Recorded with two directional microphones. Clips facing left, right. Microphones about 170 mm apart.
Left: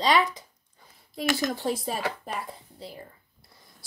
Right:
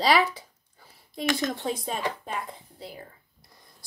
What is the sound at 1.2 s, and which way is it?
Speech, 5° left (ahead or behind).